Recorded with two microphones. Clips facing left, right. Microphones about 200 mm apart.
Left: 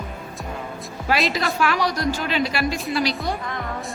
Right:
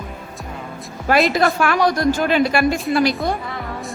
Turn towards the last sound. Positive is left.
turn(degrees=-50)  # may be behind; listen again after turning